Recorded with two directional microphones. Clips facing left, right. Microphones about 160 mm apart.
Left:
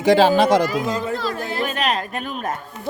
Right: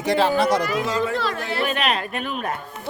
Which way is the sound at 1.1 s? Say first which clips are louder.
Even; 40° left (ahead or behind).